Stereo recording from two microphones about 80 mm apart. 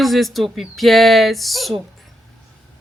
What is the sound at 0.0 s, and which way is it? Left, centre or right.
Speech, centre.